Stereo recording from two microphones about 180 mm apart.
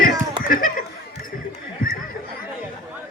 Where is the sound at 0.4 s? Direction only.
50° left (ahead or behind).